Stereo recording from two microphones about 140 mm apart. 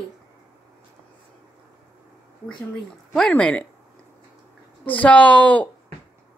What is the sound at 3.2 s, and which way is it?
Speech, 5° left (ahead or behind).